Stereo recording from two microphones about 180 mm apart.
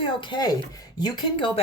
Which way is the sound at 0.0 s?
25° left (ahead or behind).